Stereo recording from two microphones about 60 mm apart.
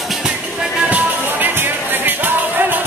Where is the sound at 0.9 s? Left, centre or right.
Right.